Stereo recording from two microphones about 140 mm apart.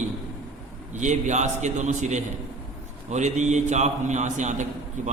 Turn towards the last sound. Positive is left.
turn(degrees=-60)  # may be behind; listen again after turning